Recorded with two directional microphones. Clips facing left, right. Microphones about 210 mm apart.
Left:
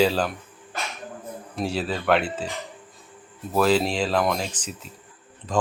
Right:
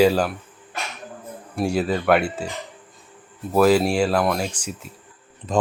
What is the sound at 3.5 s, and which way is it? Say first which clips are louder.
Speech: right 4 dB; 10° right (ahead or behind).